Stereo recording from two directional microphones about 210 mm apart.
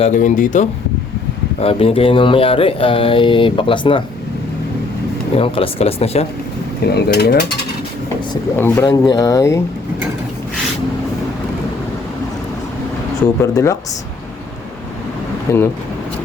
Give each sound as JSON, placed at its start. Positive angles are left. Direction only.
{"t": 0.0, "sound": "speech", "side_deg": 35}
{"t": 1.5, "sound": "speech", "side_deg": 25}
{"t": 5.4, "sound": "speech", "side_deg": 25}
{"t": 6.9, "sound": "mechanisms", "side_deg": 50}
{"t": 8.5, "sound": "speech", "side_deg": 10}
{"t": 13.4, "sound": "speech", "side_deg": 15}
{"t": 15.5, "sound": "speech", "side_deg": 15}